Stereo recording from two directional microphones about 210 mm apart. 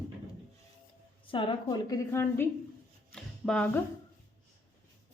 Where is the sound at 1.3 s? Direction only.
25° left (ahead or behind).